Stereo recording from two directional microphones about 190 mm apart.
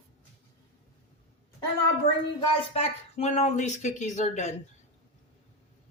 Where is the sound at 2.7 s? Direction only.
35° left (ahead or behind).